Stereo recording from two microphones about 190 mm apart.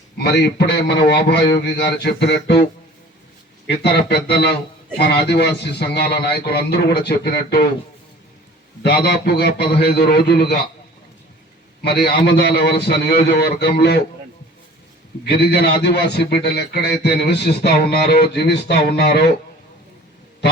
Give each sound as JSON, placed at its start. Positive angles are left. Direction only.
{"t": 0.2, "sound": "a man's voice", "side_deg": 60}
{"t": 3.7, "sound": "a man's voice", "side_deg": 60}
{"t": 8.8, "sound": "a man's voice", "side_deg": 60}
{"t": 11.8, "sound": "a man's voice", "side_deg": 55}
{"t": 15.2, "sound": "a man's voice", "side_deg": 55}